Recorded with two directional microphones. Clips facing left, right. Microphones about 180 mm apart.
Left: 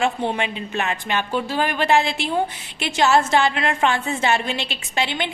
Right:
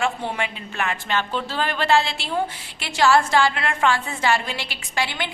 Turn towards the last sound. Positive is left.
turn(degrees=20)  # may be behind; listen again after turning